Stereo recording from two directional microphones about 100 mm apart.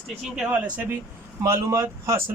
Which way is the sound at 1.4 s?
30° right (ahead or behind).